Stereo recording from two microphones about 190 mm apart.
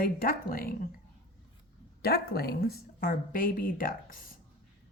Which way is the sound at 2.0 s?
55° left (ahead or behind).